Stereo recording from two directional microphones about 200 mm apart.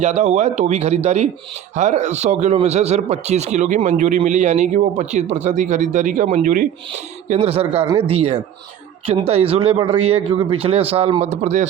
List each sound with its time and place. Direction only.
0.0 s speech: 35° right (ahead or behind)
7.3 s speech: 30° right (ahead or behind)